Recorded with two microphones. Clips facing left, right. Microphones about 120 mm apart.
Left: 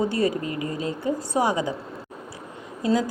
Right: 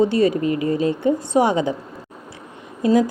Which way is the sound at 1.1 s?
25° right (ahead or behind).